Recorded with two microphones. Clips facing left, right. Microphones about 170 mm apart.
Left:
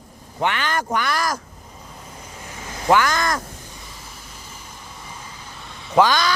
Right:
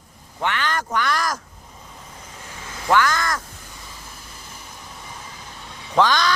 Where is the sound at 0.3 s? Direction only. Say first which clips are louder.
Left 2 dB; 15° left (ahead or behind).